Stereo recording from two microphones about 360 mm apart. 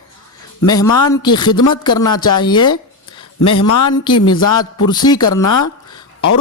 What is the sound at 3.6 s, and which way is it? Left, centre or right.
Speech, left.